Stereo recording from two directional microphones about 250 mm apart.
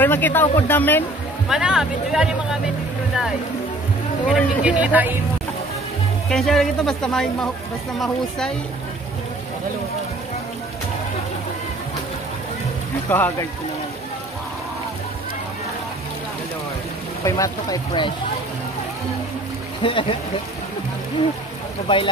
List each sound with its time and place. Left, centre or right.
0.0 s speech: centre
4.3 s speech: centre
6.2 s speech: centre
13.1 s speech: centre
17.2 s speech: centre
19.8 s speech: centre
21.8 s speech: left